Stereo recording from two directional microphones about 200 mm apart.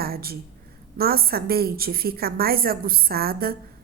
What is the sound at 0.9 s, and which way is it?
A woman's voice, 50° right (ahead or behind).